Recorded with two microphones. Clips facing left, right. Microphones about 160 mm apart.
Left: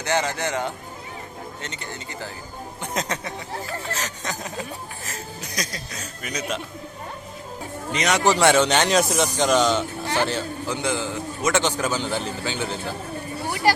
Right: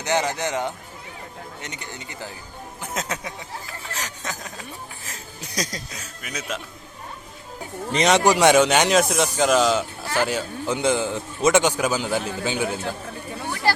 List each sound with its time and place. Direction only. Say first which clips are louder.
0.0 s speech: right 1 dB; 15° right (ahead or behind)
2.8 s speech: left 2 dB; 5° right (ahead or behind)
6.2 s speech: left 3 dB; 5° right (ahead or behind)
7.9 s a man's voice: right 5 dB; 25° right (ahead or behind)
8.2 s speech: even; 15° right (ahead or behind)
10.7 s a man's voice: right 5 dB; 20° right (ahead or behind)
13.7 s speech: left 2 dB; 15° left (ahead or behind)